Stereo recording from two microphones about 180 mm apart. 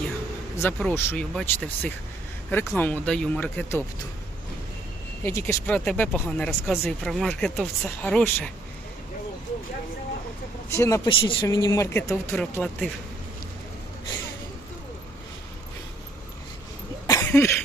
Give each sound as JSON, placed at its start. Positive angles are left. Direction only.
{"t": 0.8, "sound": "speech", "side_deg": 5}
{"t": 5.2, "sound": "speech", "side_deg": 15}
{"t": 10.7, "sound": "speech", "side_deg": 15}
{"t": 11.1, "sound": "speech", "side_deg": 30}
{"t": 11.4, "sound": "speech", "side_deg": 20}
{"t": 12.3, "sound": "speech", "side_deg": 5}
{"t": 17.1, "sound": "cough", "side_deg": 15}